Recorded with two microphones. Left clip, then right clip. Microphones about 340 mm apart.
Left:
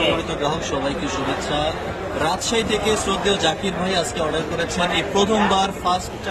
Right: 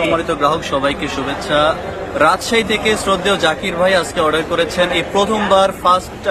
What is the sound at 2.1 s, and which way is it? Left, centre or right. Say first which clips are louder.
Speech: right 8 dB; centre.